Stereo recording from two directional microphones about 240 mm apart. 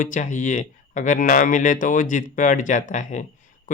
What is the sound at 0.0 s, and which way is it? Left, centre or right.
Speech, left.